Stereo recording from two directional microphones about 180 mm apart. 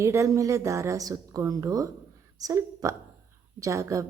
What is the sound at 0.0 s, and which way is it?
A woman's voice, 15° right (ahead or behind).